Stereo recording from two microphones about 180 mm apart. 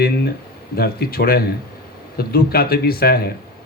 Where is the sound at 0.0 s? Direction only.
60° left (ahead or behind).